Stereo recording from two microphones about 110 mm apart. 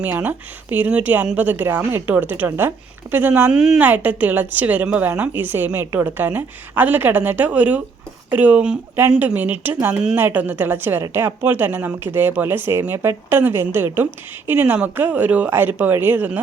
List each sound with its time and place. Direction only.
0.0 s a woman's voice: 15° right (ahead or behind)
3.5 s a woman's voice: 5° right (ahead or behind)
3.8 s a woman's voice: 15° right (ahead or behind)
9.9 s a woman's voice: 5° right (ahead or behind)
10.2 s speech: 20° right (ahead or behind)